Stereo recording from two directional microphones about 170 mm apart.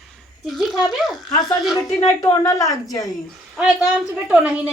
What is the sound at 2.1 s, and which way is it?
Speech, 20° left (ahead or behind).